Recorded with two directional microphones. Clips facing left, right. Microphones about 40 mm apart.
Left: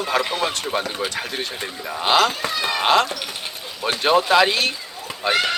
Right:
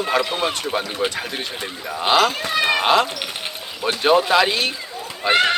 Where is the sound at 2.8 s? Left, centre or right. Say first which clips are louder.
Right 1 dB; centre.